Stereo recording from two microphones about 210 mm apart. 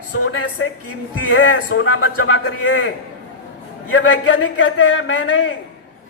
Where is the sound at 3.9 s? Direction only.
75° left (ahead or behind).